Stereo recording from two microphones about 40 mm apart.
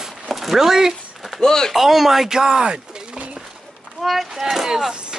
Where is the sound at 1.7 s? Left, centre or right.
Centre.